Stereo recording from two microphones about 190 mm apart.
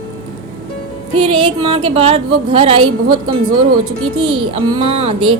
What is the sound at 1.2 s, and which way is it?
A woman's voice, 30° right (ahead or behind).